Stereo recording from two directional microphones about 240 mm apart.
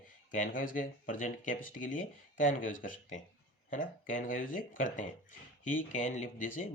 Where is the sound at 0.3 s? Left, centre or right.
Left.